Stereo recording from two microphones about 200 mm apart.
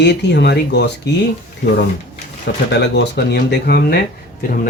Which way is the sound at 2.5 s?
60° left (ahead or behind).